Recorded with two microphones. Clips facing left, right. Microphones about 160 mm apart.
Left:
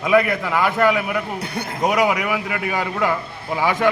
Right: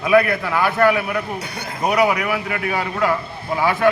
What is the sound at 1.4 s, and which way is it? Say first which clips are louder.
Speech: left 3 dB; 55° left (ahead or behind).